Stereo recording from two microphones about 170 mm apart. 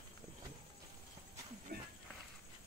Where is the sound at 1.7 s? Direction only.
65° right (ahead or behind).